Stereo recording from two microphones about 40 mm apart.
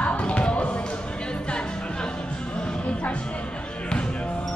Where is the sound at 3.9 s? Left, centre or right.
Left.